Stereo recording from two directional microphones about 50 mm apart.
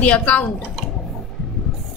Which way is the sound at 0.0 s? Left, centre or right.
Left.